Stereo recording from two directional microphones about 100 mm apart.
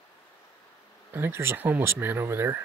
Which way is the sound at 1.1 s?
25° right (ahead or behind).